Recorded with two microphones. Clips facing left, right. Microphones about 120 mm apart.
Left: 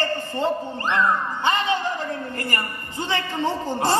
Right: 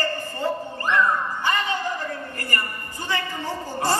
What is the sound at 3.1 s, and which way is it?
Speech, 25° left (ahead or behind).